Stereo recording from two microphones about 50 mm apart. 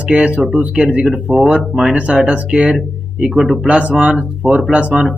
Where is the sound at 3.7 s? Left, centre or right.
Right.